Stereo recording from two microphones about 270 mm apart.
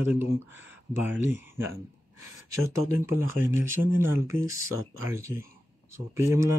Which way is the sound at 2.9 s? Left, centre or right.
Centre.